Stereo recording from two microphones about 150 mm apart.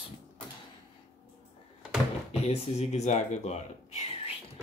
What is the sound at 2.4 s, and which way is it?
Speech, 45° left (ahead or behind).